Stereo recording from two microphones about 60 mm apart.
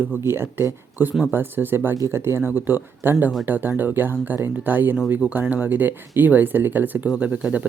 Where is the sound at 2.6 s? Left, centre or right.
Right.